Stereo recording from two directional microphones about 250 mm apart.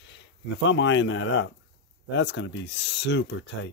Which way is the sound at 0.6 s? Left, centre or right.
Left.